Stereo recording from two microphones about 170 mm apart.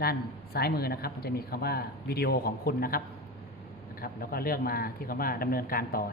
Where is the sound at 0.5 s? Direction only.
65° left (ahead or behind).